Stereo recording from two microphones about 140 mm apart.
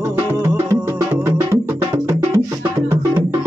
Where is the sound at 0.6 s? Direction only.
15° right (ahead or behind).